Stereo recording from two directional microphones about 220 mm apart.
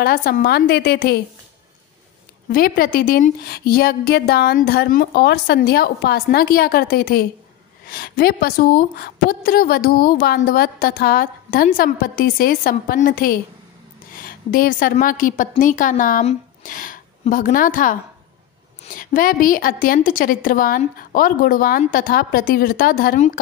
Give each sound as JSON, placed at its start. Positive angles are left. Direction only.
{"t": 0.0, "sound": "speech", "side_deg": 45}
{"t": 2.5, "sound": "a woman's voice", "side_deg": 40}
{"t": 18.9, "sound": "a woman's voice", "side_deg": 40}